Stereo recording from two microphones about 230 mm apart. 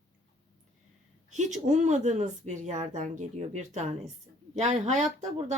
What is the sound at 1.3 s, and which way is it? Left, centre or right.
A woman's voice, right.